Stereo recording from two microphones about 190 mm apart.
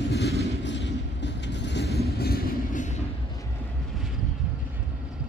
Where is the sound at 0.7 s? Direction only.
70° left (ahead or behind).